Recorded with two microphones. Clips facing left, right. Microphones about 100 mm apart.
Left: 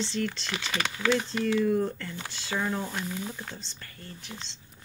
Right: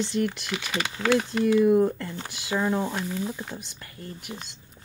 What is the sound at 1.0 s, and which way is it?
Speech, 40° right (ahead or behind).